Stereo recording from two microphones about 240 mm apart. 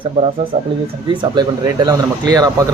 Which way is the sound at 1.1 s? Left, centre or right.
Centre.